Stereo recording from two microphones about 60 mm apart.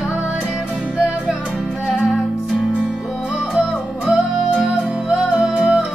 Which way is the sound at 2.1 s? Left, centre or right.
Centre.